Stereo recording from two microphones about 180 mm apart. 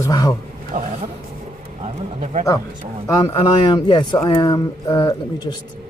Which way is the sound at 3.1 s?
20° left (ahead or behind).